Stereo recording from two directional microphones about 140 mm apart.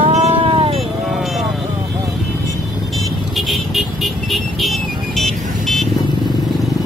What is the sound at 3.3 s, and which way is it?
Vehicle, centre (ahead or behind).